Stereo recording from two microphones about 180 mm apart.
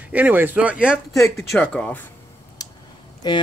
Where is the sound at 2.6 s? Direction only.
20° left (ahead or behind).